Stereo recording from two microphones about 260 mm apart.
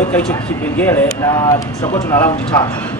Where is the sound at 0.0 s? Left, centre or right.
Centre.